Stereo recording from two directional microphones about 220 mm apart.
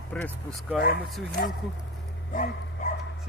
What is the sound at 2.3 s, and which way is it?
Dog, 35° left (ahead or behind).